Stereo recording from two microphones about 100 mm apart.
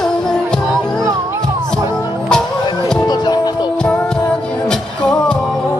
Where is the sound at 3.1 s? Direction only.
45° left (ahead or behind).